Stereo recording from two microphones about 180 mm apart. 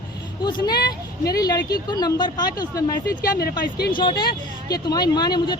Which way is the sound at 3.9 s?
25° left (ahead or behind).